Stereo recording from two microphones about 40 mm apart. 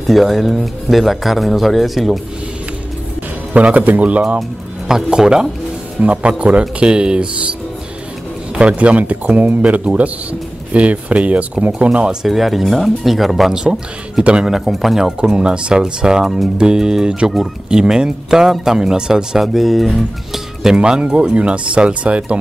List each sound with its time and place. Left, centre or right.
0.0 s speech: centre
3.5 s speech: right
4.4 s speech: centre
5.9 s speech: right
8.5 s speech: right
12.3 s speech: centre
13.5 s speech: centre
15.2 s speech: right
19.3 s speech: centre
20.6 s speech: centre